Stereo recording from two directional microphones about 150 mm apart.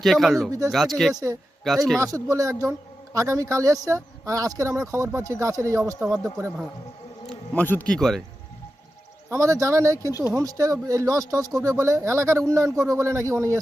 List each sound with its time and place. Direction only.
0.0 s speech: centre (ahead or behind)
1.1 s speech: 20° right (ahead or behind)
1.6 s speech: centre (ahead or behind)
2.0 s speech: 20° right (ahead or behind)
6.0 s speech: 5° right (ahead or behind)
7.5 s speech: 10° left (ahead or behind)
9.3 s speech: 20° right (ahead or behind)
10.1 s speech: 25° left (ahead or behind)
10.3 s speech: 20° right (ahead or behind)